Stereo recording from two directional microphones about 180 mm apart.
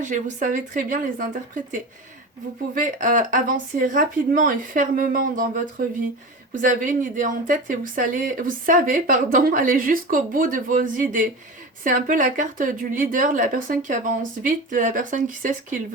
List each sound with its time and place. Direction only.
0.0 s a woman's voice: 45° right (ahead or behind)